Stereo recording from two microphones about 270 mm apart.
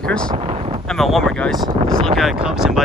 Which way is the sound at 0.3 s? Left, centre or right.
Right.